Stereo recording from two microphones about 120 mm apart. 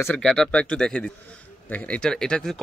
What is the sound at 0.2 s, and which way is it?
Speech, 5° left (ahead or behind).